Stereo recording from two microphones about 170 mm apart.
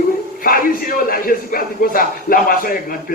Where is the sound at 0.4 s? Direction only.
55° left (ahead or behind).